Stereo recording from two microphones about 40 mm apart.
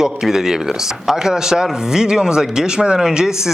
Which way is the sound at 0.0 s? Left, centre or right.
Centre.